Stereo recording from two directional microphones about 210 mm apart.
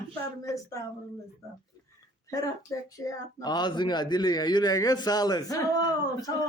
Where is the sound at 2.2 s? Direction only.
15° left (ahead or behind).